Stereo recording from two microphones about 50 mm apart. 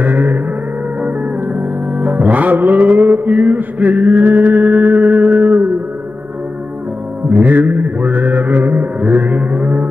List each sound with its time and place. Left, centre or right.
0.0 s gong: right
1.5 s music: right
7.2 s mantra: right